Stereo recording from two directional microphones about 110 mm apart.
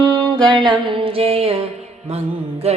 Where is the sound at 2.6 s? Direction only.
70° right (ahead or behind).